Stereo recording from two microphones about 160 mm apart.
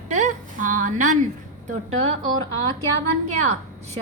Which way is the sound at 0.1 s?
50° right (ahead or behind).